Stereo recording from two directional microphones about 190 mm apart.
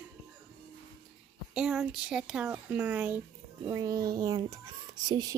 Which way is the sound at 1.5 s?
5° right (ahead or behind).